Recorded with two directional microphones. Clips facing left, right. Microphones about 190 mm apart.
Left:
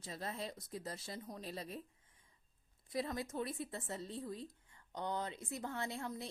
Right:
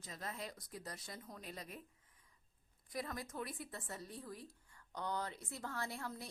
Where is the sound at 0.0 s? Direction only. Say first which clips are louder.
Left 3 dB; 30° left (ahead or behind).